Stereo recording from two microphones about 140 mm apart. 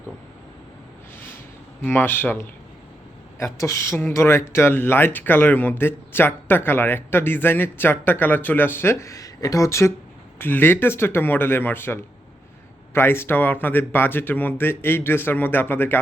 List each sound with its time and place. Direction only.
1.8 s speech: 15° left (ahead or behind)